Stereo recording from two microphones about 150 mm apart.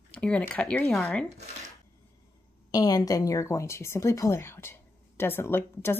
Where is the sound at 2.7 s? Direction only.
25° left (ahead or behind).